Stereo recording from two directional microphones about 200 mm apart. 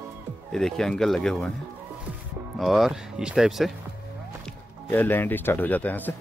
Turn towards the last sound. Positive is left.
turn(degrees=10)  # may be behind; listen again after turning